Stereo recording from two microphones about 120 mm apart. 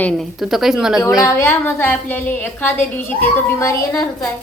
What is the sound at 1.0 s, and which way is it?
A woman's voice, 25° left (ahead or behind).